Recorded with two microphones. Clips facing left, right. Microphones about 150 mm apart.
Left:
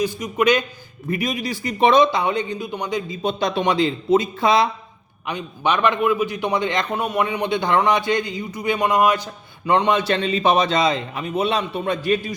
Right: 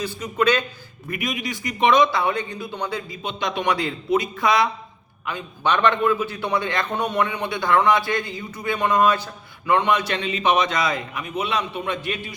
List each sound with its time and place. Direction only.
0.0 s a man's voice: 15° left (ahead or behind)
1.1 s speech: 35° left (ahead or behind); by 3.2 s 15° left (ahead or behind)
3.2 s a man's voice: 35° left (ahead or behind)
3.6 s speech: 20° left (ahead or behind)
5.2 s a man's voice: 15° left (ahead or behind)
6.9 s a man's voice: 5° left (ahead or behind)
7.3 s a man's voice: 20° left (ahead or behind); by 12.2 s 35° left (ahead or behind)